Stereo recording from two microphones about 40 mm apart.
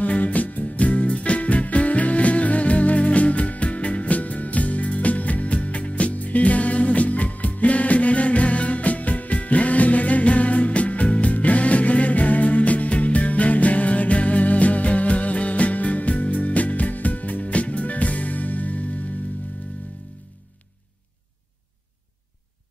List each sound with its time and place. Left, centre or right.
0.0 s music: left